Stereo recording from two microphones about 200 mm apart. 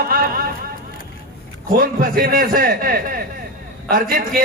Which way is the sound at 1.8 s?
45° right (ahead or behind).